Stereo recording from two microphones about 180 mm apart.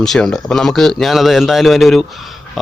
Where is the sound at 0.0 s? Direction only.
Centre (ahead or behind).